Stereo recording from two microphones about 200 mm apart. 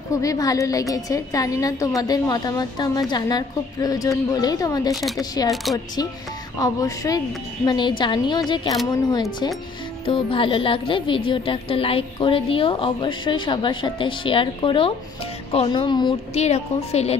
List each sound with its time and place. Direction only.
0.1 s a woman's voice: 15° left (ahead or behind)
6.6 s a woman's voice: 15° left (ahead or behind)